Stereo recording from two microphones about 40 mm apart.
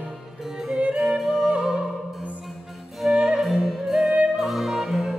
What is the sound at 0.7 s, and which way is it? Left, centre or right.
Music, right.